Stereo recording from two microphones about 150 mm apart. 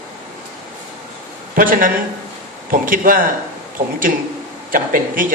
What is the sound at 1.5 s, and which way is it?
Speech, 65° right (ahead or behind).